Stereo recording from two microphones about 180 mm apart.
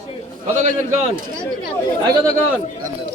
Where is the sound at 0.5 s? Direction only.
40° right (ahead or behind).